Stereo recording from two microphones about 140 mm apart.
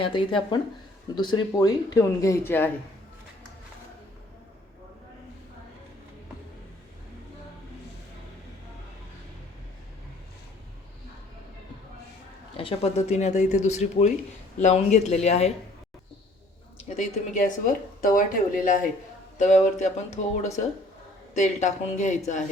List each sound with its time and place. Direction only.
0.0 s speech: 35° left (ahead or behind); by 2.7 s 15° left (ahead or behind)
12.5 s speech: 45° left (ahead or behind)
16.7 s speech: 55° left (ahead or behind); by 18.9 s 70° left (ahead or behind)
19.4 s speech: 60° left (ahead or behind)
21.3 s speech: 60° left (ahead or behind)